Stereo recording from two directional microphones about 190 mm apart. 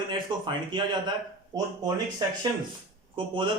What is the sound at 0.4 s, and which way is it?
Speech, 25° right (ahead or behind).